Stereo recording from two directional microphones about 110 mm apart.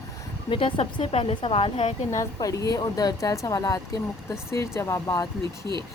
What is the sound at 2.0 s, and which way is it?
A woman's voice, 30° left (ahead or behind).